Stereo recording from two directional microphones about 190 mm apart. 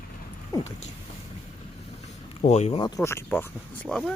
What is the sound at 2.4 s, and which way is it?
Speech, 35° left (ahead or behind).